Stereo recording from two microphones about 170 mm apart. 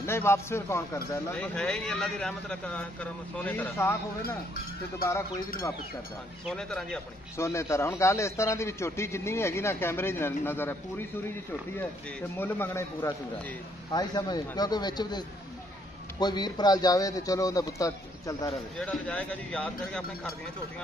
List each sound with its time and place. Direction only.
0.0 s speech: 15° left (ahead or behind)
5.0 s speech: 15° left (ahead or behind)
6.4 s speech: 5° left (ahead or behind)
7.3 s speech: 15° left (ahead or behind)
12.4 s speech: 10° left (ahead or behind)
13.9 s speech: 25° left (ahead or behind)
18.8 s speech: 10° left (ahead or behind)